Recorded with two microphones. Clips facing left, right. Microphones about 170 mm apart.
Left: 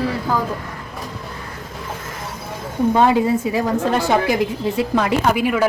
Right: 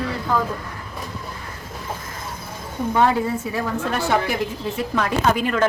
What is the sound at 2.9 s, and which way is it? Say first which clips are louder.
Speech: left 2 dB; 15° left (ahead or behind).